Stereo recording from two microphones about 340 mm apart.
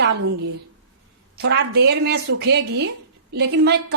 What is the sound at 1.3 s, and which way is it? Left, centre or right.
A woman's voice, right.